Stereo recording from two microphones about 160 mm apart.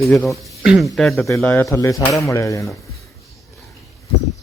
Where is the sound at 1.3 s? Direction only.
15° left (ahead or behind).